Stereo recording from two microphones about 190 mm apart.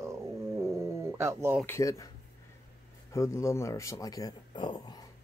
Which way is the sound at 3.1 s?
15° left (ahead or behind).